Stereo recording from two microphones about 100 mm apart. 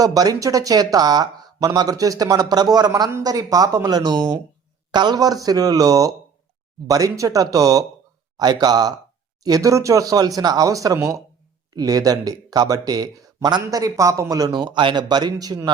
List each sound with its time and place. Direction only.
0.0 s a man's voice: 40° right (ahead or behind)
14.5 s a man's voice: 50° right (ahead or behind)